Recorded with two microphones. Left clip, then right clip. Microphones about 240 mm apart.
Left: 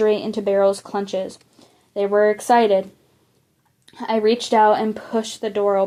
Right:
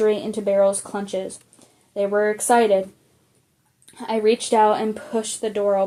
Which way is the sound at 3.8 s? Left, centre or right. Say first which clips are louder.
Left 1 dB; left.